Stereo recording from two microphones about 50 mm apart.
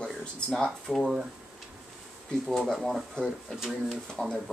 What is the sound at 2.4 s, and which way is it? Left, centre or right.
Speech, centre.